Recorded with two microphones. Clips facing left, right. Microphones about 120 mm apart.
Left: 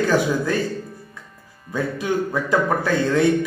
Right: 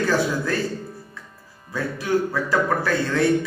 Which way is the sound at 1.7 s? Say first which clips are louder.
Even; 20° left (ahead or behind).